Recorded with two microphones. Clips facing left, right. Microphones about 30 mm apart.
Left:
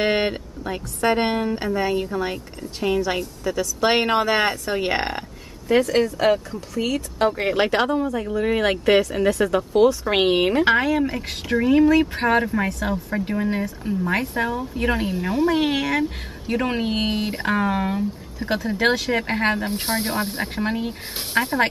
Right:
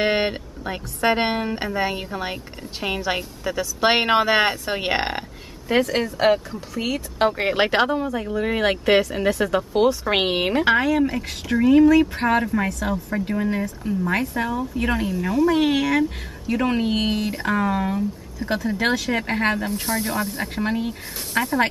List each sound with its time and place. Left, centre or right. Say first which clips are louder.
0.0 s speech: even; centre
10.6 s speech: even; centre
15.0 s speech: right 1 dB; left
19.7 s speech: even; left
20.5 s speech: right 2 dB; centre